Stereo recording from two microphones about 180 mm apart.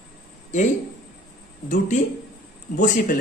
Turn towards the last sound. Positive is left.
turn(degrees=45)  # may be behind; listen again after turning